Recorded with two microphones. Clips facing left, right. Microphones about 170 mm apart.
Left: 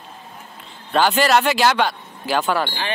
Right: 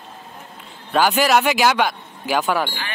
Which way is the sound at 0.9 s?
10° right (ahead or behind).